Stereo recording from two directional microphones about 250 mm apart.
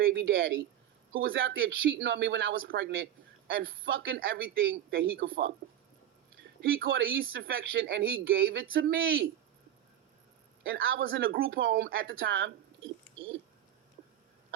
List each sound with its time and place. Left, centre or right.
0.0 s a man's voice: right
10.6 s a man's voice: right
11.3 s a man's voice: right
14.0 s a sound: right